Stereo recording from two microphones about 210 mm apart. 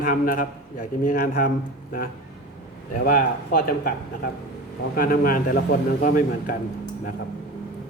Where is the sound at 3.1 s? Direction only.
40° left (ahead or behind).